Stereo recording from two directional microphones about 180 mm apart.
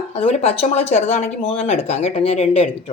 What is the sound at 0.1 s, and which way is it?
Speech, 35° left (ahead or behind).